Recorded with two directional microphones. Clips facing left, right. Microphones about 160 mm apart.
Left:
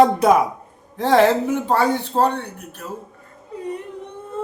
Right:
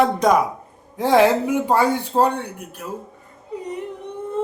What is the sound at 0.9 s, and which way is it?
Speech, 10° right (ahead or behind).